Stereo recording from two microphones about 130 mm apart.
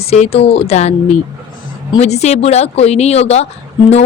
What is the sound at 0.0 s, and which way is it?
Speech, 50° left (ahead or behind).